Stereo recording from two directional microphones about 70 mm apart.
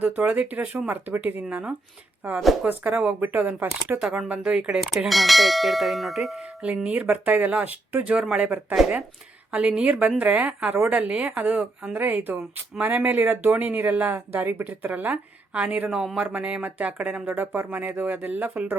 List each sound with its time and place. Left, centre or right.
0.0 s speech: right
4.8 s speech: centre
6.4 s speech: centre